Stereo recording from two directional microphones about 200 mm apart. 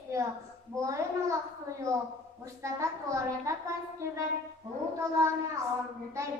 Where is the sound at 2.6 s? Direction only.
15° right (ahead or behind).